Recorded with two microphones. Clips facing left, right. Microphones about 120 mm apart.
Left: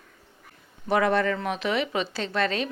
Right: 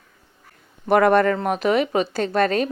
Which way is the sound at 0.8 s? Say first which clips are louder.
Right 7 dB; 55° right (ahead or behind).